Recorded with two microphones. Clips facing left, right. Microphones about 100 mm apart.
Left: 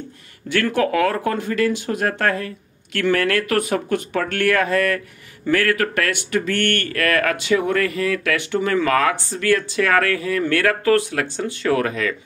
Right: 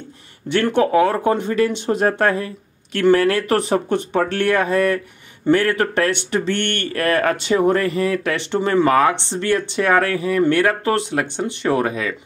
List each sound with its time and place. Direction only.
0.5 s speech: 25° right (ahead or behind)